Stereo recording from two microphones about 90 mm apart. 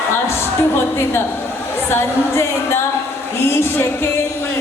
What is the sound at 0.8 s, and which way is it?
A woman's voice, 25° left (ahead or behind).